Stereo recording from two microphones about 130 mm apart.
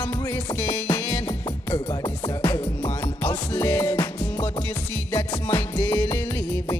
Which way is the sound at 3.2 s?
10° left (ahead or behind).